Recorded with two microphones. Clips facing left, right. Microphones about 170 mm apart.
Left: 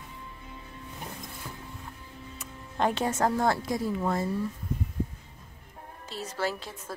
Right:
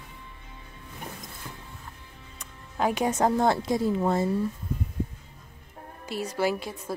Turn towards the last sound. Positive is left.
turn(degrees=-10)  # may be behind; listen again after turning